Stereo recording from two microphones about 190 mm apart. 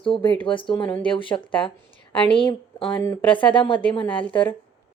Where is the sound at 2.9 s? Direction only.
15° left (ahead or behind).